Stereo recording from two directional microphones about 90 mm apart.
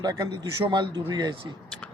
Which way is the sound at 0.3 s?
55° right (ahead or behind).